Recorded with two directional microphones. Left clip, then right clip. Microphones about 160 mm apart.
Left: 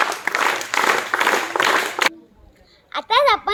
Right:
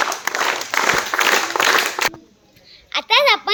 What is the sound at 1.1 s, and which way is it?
Applause, 35° right (ahead or behind).